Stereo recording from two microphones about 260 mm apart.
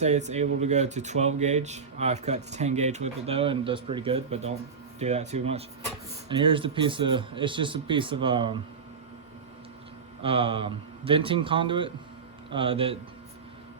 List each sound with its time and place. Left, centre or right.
0.0 s speech: right
10.2 s speech: right